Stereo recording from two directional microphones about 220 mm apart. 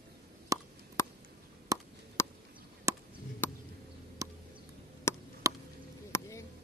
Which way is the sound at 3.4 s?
10° left (ahead or behind).